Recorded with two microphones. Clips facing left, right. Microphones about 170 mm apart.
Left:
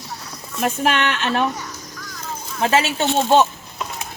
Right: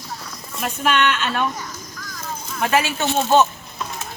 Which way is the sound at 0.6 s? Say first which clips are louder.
Left 1 dB; 40° left (ahead or behind).